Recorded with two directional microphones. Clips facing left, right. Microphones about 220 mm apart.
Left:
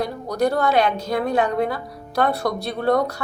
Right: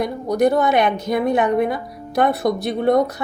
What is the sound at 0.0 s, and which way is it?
A woman's voice, 20° right (ahead or behind).